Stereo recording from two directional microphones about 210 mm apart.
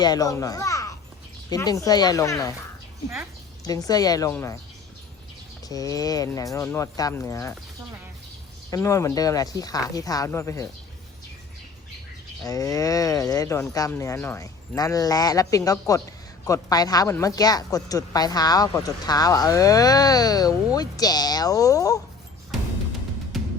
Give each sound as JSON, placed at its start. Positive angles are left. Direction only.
{"t": 0.0, "sound": "speech", "side_deg": 20}
{"t": 3.6, "sound": "speech", "side_deg": 15}
{"t": 5.6, "sound": "speech", "side_deg": 15}
{"t": 8.7, "sound": "speech", "side_deg": 15}
{"t": 12.4, "sound": "speech", "side_deg": 15}